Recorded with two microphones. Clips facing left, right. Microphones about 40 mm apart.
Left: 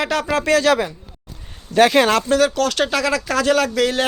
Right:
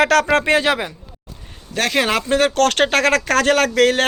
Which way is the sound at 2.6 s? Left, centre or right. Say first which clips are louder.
Right 3 dB; right.